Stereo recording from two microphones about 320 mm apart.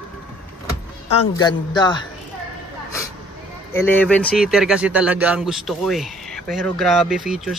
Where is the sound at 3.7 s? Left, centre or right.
Centre.